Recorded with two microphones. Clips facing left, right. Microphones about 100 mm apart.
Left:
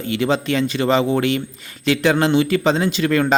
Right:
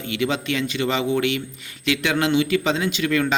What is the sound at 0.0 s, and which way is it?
A man's voice, 35° left (ahead or behind).